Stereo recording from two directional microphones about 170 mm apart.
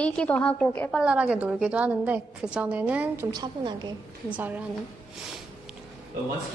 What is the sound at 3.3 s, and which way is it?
Speech, 25° right (ahead or behind).